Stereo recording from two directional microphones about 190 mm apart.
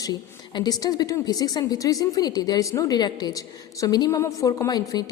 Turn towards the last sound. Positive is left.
turn(degrees=20)  # may be behind; listen again after turning